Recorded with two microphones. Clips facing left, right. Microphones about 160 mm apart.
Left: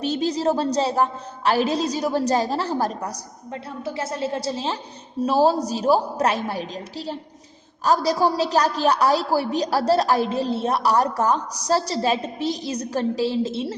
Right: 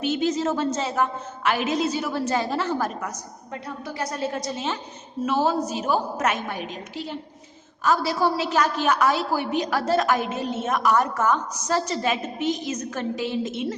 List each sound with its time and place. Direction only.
0.0 s a woman's voice: 35° left (ahead or behind)